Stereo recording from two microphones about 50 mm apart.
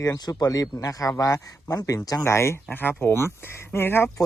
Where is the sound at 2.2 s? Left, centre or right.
Left.